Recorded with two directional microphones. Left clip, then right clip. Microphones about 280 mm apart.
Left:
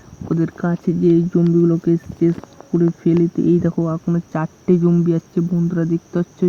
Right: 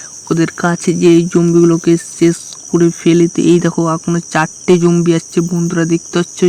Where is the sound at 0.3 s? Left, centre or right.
Centre.